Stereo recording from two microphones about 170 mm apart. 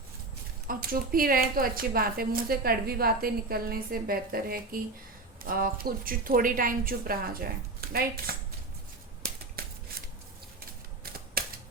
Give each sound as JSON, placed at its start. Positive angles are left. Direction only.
{"t": 0.7, "sound": "a woman's voice", "side_deg": -55}
{"t": 9.6, "sound": "scissors", "side_deg": -65}
{"t": 11.4, "sound": "typewriter", "side_deg": -60}